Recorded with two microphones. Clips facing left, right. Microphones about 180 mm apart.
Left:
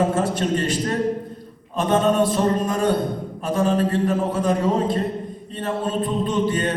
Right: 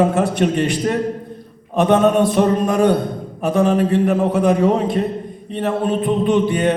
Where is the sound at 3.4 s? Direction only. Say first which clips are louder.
Right 5 dB; 70° right (ahead or behind).